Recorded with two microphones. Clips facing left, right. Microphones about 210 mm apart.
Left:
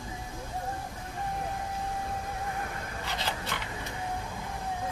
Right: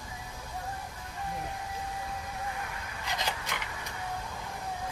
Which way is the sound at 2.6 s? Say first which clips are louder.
Left 3 dB; 40° left (ahead or behind).